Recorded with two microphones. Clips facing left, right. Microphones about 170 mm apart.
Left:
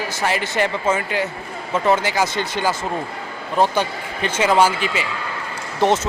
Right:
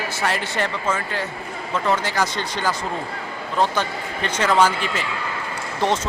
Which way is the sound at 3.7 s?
10° left (ahead or behind).